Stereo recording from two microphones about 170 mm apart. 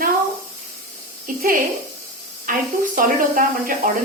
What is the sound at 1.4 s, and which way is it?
A woman's voice, 55° right (ahead or behind).